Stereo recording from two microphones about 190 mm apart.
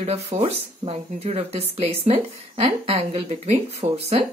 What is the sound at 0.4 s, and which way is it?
Speech, 35° right (ahead or behind).